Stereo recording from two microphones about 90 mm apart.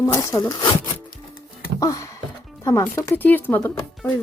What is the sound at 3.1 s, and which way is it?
Speech, 20° left (ahead or behind).